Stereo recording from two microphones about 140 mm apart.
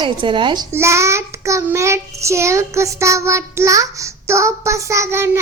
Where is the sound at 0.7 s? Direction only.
20° right (ahead or behind).